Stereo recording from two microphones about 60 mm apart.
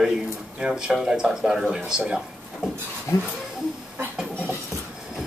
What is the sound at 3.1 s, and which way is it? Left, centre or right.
Speech, left.